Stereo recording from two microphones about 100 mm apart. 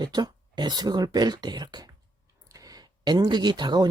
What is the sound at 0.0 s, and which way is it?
Speech, 45° right (ahead or behind).